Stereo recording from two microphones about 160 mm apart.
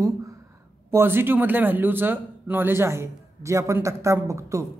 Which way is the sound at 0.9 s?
15° right (ahead or behind).